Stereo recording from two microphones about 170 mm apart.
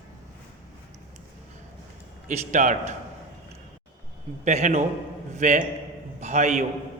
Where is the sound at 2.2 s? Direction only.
45° right (ahead or behind).